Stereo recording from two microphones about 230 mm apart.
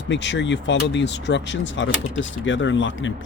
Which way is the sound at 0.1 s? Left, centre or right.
Left.